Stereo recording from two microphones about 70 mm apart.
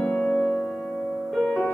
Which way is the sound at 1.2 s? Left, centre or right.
Centre.